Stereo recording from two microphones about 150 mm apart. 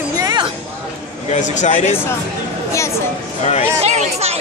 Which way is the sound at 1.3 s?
55° left (ahead or behind).